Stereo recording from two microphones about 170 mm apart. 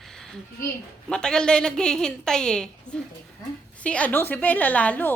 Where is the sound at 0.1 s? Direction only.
5° left (ahead or behind).